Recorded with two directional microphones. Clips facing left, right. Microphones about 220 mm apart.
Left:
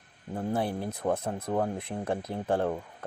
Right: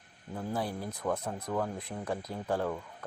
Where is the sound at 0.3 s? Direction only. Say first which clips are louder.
Left 5 dB; 25° left (ahead or behind).